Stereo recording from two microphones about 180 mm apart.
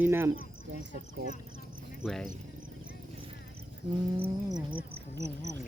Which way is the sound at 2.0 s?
Centre (ahead or behind).